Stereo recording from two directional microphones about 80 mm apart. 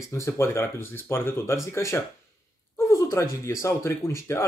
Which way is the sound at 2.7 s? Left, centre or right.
Left.